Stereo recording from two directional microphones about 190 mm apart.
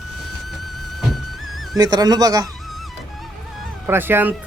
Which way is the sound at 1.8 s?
20° right (ahead or behind).